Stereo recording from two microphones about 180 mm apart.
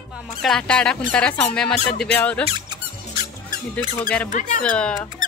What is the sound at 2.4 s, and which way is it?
Squeak, 25° right (ahead or behind).